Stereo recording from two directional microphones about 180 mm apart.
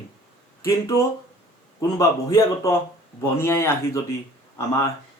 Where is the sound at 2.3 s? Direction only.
20° left (ahead or behind).